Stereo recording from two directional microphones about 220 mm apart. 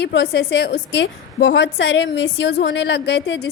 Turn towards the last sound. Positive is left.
turn(degrees=50)  # may be behind; listen again after turning